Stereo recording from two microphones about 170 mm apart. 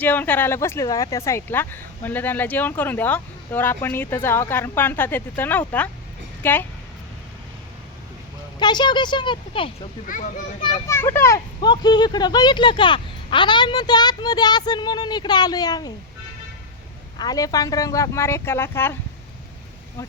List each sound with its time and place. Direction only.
0.0 s speech: 10° left (ahead or behind)
8.5 s speech: 25° left (ahead or behind)
10.9 s speech: 15° left (ahead or behind)
11.6 s speech: 25° left (ahead or behind)
17.2 s speech: 20° left (ahead or behind)